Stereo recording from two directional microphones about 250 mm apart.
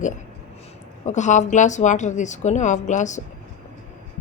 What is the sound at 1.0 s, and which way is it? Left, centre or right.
A woman's voice, left.